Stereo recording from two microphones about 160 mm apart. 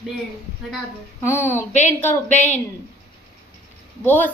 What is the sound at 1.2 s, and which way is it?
Speech, 15° left (ahead or behind).